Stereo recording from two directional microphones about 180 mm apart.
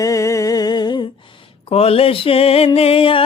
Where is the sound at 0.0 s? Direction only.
20° left (ahead or behind).